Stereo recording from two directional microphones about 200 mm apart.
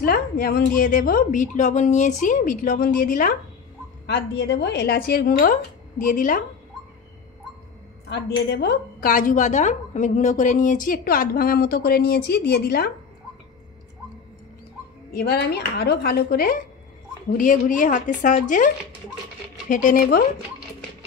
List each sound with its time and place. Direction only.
0.0 s a woman's voice: 45° left (ahead or behind)
4.0 s a woman's voice: 55° left (ahead or behind)
8.1 s a woman's voice: 55° left (ahead or behind)
15.1 s a woman's voice: 55° left (ahead or behind)
19.7 s speech: 40° left (ahead or behind)